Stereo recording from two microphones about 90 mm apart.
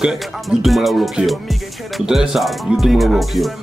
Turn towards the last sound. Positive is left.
turn(degrees=0)  # may be behind; listen again after turning